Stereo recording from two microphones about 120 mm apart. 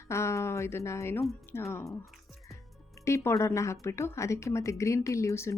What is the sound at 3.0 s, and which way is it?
Speech, 25° left (ahead or behind).